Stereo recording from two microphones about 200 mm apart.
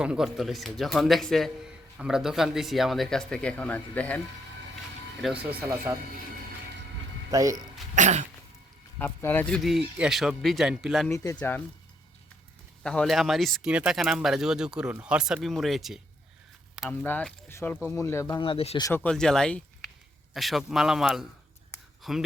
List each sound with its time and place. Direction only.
0.0 s a man's voice: 5° right (ahead or behind)
5.2 s speech: 5° right (ahead or behind)
7.3 s speech: 15° right (ahead or behind)
7.9 s cough: 40° right (ahead or behind)
9.0 s a man's voice: 10° left (ahead or behind)
11.1 s speech: 15° left (ahead or behind)
12.8 s a man's voice: 5° left (ahead or behind)
17.1 s speech: 10° left (ahead or behind)
18.4 s speech: 30° left (ahead or behind)
18.8 s a man's voice: 10° left (ahead or behind)